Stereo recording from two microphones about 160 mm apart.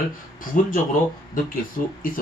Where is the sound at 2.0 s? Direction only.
60° left (ahead or behind).